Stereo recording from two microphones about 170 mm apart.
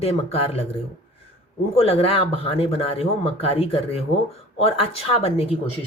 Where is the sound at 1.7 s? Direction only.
35° left (ahead or behind).